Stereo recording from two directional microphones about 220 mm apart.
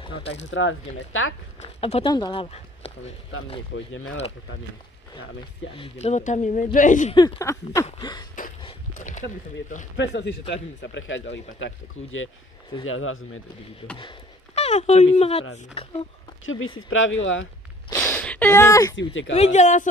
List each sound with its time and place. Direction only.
0.0 s speech: 25° left (ahead or behind)
0.5 s a man's voice: 60° left (ahead or behind)
1.6 s speech: 30° left (ahead or behind)
3.7 s a man's voice: 65° left (ahead or behind)
5.8 s speech: 30° left (ahead or behind)
7.2 s speech: 15° left (ahead or behind)
8.6 s a sound: 35° left (ahead or behind)
9.9 s a man's voice: 55° left (ahead or behind)
13.9 s speech: 25° left (ahead or behind)
16.4 s a man's voice: 65° left (ahead or behind)
17.8 s a sound: 10° left (ahead or behind)
18.9 s a man's voice: 60° left (ahead or behind)
19.3 s speech: 30° left (ahead or behind)